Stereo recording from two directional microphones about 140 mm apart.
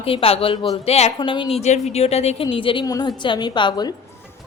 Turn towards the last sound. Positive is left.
turn(degrees=30)  # may be behind; listen again after turning